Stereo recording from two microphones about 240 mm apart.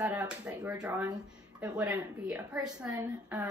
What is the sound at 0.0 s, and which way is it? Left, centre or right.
A woman's voice, centre.